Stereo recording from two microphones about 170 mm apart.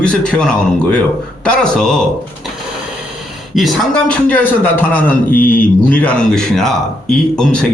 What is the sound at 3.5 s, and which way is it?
A man's voice, centre (ahead or behind).